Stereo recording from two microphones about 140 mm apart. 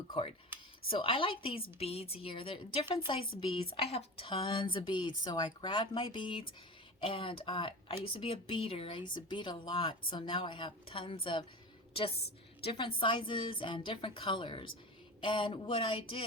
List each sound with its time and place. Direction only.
0.1 s speech: 40° left (ahead or behind)
12.6 s speech: 35° left (ahead or behind)